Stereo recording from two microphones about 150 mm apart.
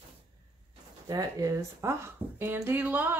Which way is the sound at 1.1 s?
20° right (ahead or behind).